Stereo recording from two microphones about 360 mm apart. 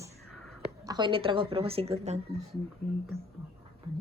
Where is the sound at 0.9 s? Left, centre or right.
Centre.